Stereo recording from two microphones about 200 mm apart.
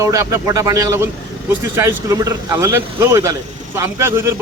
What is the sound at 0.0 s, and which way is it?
A man's voice, 15° right (ahead or behind).